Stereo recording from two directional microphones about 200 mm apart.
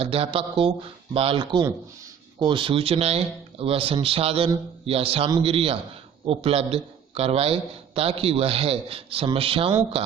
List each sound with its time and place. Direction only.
0.0 s a man's voice: 30° right (ahead or behind)